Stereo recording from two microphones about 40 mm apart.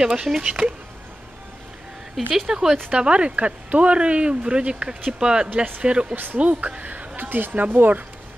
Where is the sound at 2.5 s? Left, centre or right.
Centre.